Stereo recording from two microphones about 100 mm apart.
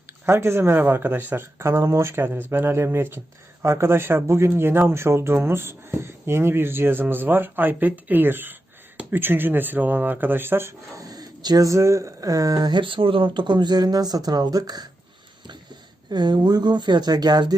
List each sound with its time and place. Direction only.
0.3 s speech: 25° right (ahead or behind); by 14.8 s 40° right (ahead or behind)
16.0 s speech: 45° right (ahead or behind)